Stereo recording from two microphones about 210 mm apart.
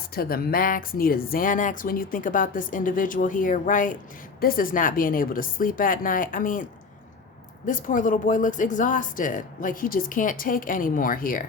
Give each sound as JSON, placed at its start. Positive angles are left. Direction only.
{"t": 0.1, "sound": "speech", "side_deg": 45}
{"t": 7.7, "sound": "speech", "side_deg": 40}